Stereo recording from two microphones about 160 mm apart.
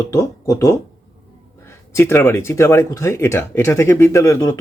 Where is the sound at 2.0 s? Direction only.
15° left (ahead or behind).